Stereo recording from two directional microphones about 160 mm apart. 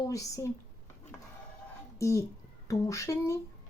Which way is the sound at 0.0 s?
20° left (ahead or behind).